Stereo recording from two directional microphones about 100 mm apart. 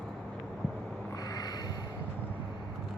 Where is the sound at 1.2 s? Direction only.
40° left (ahead or behind).